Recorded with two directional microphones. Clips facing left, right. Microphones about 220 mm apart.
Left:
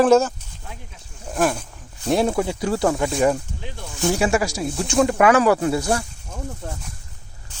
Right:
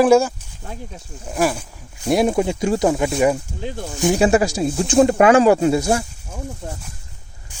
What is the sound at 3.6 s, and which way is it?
Speech, 40° right (ahead or behind).